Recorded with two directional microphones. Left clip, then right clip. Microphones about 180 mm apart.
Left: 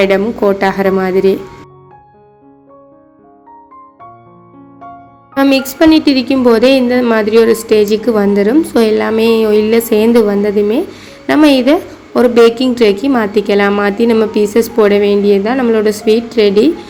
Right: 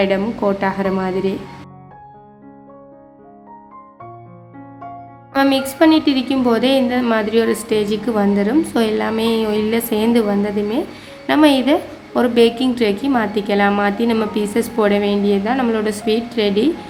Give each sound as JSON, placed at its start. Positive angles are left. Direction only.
{"t": 0.0, "sound": "a woman's voice", "side_deg": 20}
{"t": 5.3, "sound": "a woman's voice", "side_deg": 25}